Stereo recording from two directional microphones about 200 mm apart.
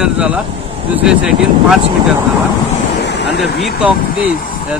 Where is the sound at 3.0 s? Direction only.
60° left (ahead or behind).